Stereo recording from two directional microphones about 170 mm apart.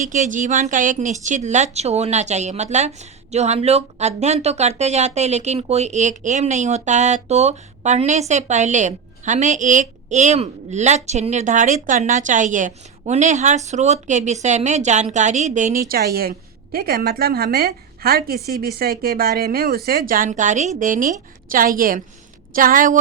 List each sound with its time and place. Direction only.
0.1 s speech: 45° right (ahead or behind)
15.9 s a woman's voice: 60° right (ahead or behind)